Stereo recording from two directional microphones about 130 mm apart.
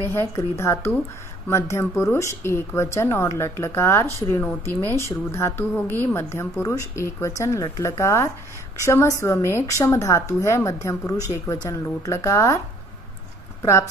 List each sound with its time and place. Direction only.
0.1 s speech: 20° left (ahead or behind)